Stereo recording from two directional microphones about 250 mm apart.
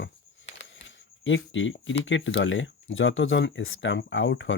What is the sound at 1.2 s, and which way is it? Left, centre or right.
Speech, left.